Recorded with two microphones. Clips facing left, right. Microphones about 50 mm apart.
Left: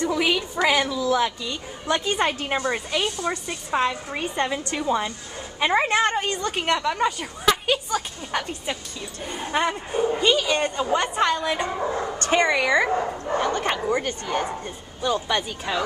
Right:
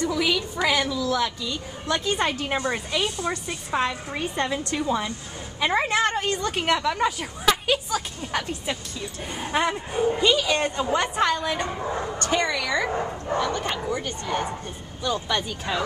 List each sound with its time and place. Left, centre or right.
0.0 s a woman's voice: left
12.3 s speech: left
13.4 s speech: left
15.0 s a woman's voice: centre